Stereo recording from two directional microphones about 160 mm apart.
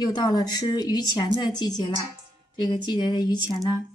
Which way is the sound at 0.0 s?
25° left (ahead or behind).